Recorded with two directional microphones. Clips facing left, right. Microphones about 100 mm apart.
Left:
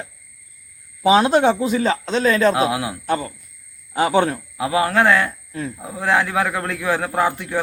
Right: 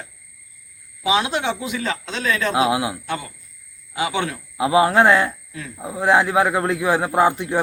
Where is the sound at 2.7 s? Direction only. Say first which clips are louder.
Right 2 dB; 20° right (ahead or behind).